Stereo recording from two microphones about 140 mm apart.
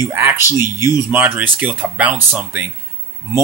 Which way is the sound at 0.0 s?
20° right (ahead or behind).